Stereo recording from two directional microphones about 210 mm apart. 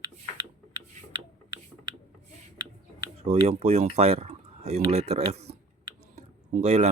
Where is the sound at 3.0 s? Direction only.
20° right (ahead or behind).